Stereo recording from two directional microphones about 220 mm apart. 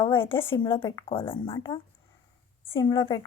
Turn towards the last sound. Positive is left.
turn(degrees=20)  # may be behind; listen again after turning